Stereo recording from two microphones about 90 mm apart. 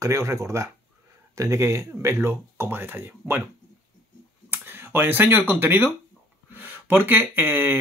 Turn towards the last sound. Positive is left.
turn(degrees=-20)  # may be behind; listen again after turning